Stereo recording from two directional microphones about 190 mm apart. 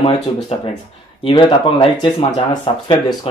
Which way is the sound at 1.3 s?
25° left (ahead or behind).